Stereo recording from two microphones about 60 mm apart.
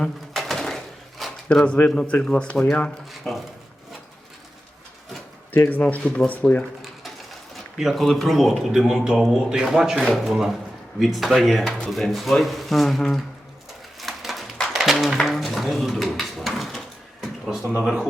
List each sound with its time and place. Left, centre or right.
0.3 s a sound: centre
1.5 s speech: centre
3.1 s speech: centre
5.6 s speech: left
7.5 s speech: centre
14.0 s a sound: centre
17.8 s speech: centre